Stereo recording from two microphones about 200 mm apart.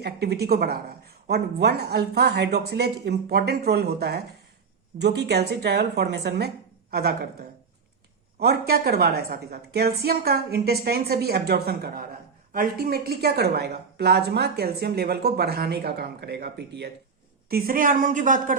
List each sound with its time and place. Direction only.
0.0 s a woman's voice: 55° right (ahead or behind)
17.5 s a woman's voice: 45° right (ahead or behind)